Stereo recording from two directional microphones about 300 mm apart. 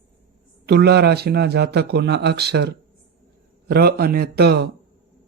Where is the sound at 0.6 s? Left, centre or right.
Right.